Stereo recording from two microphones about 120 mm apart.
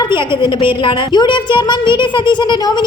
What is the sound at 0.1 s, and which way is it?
Speech, 45° left (ahead or behind).